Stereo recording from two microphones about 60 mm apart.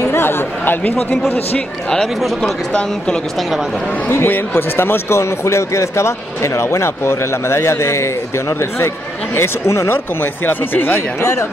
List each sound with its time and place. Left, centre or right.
0.0 s chatter: left
4.1 s a man's voice: left